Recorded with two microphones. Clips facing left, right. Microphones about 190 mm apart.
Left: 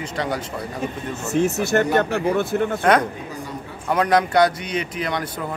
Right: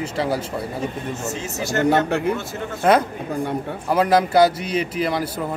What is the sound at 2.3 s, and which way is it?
Speech, 60° left (ahead or behind).